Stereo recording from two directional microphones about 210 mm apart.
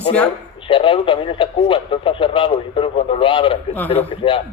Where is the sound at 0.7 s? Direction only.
25° left (ahead or behind).